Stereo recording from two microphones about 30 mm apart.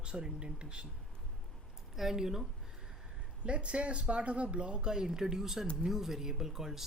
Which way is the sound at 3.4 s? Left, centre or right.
Right.